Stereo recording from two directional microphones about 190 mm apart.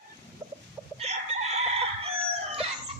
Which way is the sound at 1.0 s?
35° right (ahead or behind).